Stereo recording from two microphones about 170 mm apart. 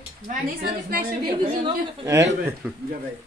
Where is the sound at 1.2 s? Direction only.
20° right (ahead or behind).